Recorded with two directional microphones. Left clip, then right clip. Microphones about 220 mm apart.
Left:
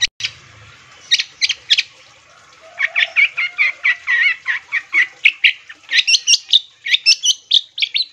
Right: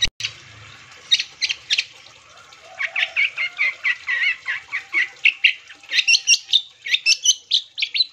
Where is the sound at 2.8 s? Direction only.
15° left (ahead or behind).